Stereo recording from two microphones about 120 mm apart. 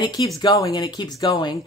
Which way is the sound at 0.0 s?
35° left (ahead or behind).